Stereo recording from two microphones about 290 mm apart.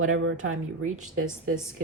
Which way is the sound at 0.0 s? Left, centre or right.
Right.